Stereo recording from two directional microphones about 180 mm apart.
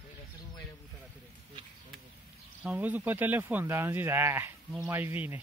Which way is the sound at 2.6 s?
10° right (ahead or behind).